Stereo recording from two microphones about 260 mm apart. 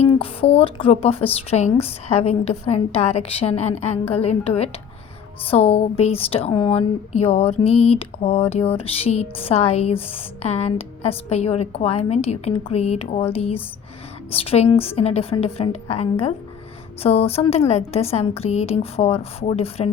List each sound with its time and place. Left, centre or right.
0.1 s a woman's voice: left